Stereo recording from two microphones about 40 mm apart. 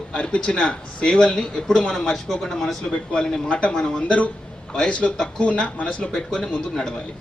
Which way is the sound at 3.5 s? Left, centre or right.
Left.